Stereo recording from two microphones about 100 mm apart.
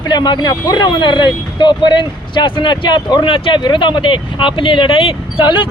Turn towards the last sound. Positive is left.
turn(degrees=55)  # may be behind; listen again after turning